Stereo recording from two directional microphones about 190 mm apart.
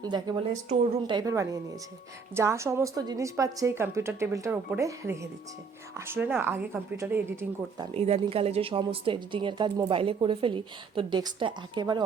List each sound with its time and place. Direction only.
0.0 s a woman's voice: 20° right (ahead or behind)
7.9 s a woman's voice: 30° right (ahead or behind)